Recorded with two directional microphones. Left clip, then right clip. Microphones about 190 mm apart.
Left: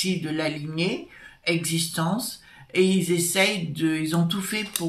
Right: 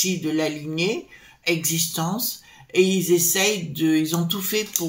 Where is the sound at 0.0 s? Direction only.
45° right (ahead or behind).